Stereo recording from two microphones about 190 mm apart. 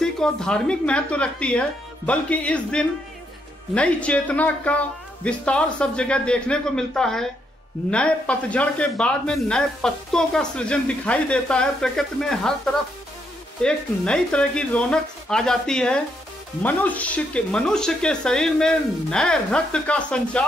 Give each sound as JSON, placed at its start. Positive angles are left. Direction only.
{"t": 0.0, "sound": "speech", "side_deg": 5}
{"t": 13.6, "sound": "speech", "side_deg": 5}